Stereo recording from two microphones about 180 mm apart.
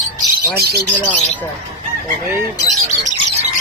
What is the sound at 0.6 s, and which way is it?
Speech, 60° right (ahead or behind).